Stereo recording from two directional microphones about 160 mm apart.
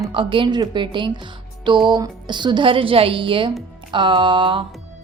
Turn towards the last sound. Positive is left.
turn(degrees=-30)  # may be behind; listen again after turning